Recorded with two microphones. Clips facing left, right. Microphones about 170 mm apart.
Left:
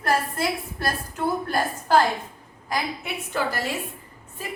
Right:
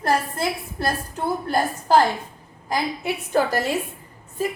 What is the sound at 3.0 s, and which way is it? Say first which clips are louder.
Speech: right 6 dB; 40° right (ahead or behind).